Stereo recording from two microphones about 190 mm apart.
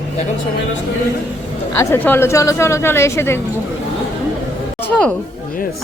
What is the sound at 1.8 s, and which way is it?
Speech, 10° left (ahead or behind).